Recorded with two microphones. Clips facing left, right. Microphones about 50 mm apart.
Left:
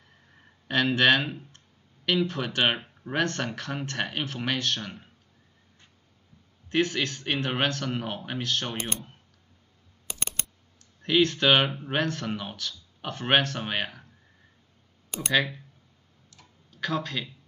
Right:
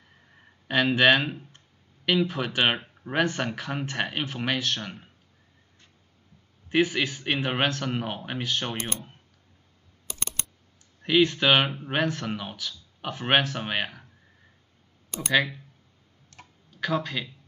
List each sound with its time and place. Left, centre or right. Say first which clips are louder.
0.7 s speech: right 2 dB; centre
6.7 s speech: right 2 dB; centre
11.0 s speech: right 1 dB; centre
15.2 s speech: right 1 dB; centre
16.3 s tick-tock: right 6 dB; right
16.7 s speech: right 2 dB; centre